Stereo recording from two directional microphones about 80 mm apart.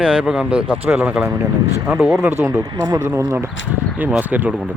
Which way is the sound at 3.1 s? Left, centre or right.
Right.